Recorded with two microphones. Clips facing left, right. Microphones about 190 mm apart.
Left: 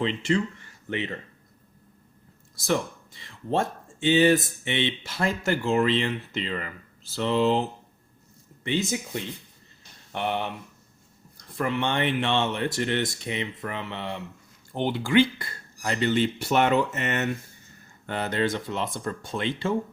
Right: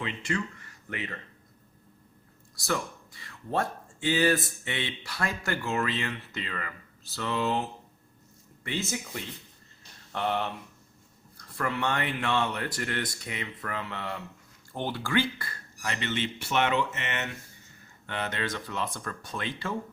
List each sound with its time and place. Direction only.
0.0 s speech: 30° left (ahead or behind)
2.6 s speech: 20° left (ahead or behind)
8.6 s speech: 20° left (ahead or behind)
10.1 s speech: 20° left (ahead or behind)